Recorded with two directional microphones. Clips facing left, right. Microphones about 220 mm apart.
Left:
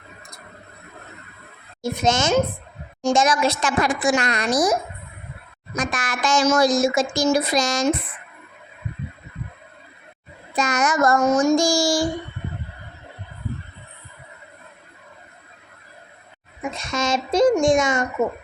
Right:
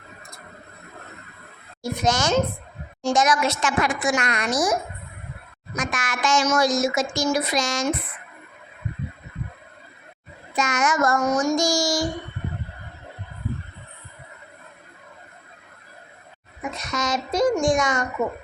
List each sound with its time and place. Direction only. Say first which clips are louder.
1.8 s a child's voice: left 2 dB; 25° left (ahead or behind)
10.5 s a child's voice: left 2 dB; 35° left (ahead or behind)
16.7 s a child's voice: left 3 dB; 25° left (ahead or behind)